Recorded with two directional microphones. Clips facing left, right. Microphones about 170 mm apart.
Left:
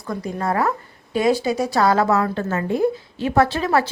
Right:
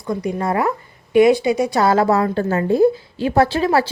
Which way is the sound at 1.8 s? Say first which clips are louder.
Right 1 dB; 30° right (ahead or behind).